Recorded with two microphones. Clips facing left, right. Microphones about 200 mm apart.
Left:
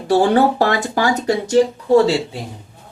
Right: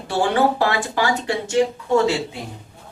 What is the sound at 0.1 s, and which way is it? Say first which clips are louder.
Speech: left 5 dB; 40° left (ahead or behind).